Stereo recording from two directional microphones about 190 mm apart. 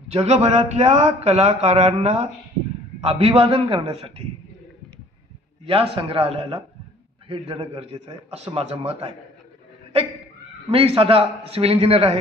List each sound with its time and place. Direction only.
0.1 s a man's voice: 35° right (ahead or behind)
5.9 s a man's voice: 30° right (ahead or behind)
10.7 s a man's voice: 30° right (ahead or behind)